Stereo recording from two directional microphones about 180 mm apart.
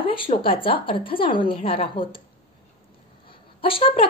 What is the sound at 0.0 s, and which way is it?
A woman's voice, 30° left (ahead or behind).